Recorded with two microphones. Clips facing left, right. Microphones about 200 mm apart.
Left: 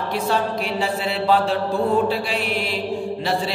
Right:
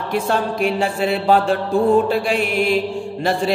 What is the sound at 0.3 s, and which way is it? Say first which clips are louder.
Mantra: right 4 dB; 50° right (ahead or behind).